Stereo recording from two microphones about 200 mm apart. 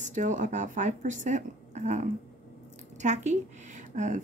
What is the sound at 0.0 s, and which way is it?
A woman's voice, 40° right (ahead or behind).